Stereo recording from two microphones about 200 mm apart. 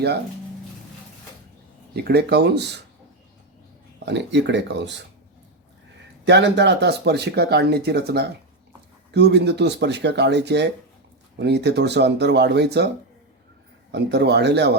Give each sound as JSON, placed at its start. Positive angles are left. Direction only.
{"t": 1.9, "sound": "speech", "side_deg": -55}
{"t": 4.0, "sound": "speech", "side_deg": -60}
{"t": 6.2, "sound": "speech", "side_deg": -60}
{"t": 13.9, "sound": "speech", "side_deg": -55}